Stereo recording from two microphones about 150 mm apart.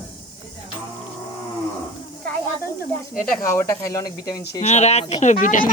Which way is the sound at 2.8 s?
70° left (ahead or behind).